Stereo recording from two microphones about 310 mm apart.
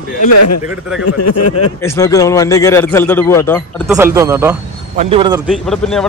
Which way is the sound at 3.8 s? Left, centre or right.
Centre.